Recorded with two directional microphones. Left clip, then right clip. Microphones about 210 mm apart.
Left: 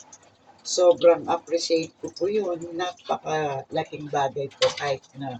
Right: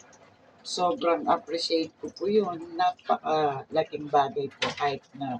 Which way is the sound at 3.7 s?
Centre (ahead or behind).